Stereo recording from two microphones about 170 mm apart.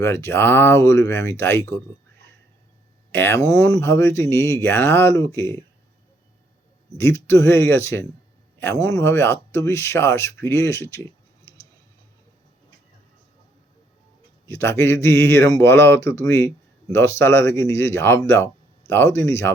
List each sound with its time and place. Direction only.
0.0 s speech: 15° left (ahead or behind)
3.1 s speech: 15° left (ahead or behind)
6.9 s speech: 15° left (ahead or behind)
14.4 s speech: 15° left (ahead or behind)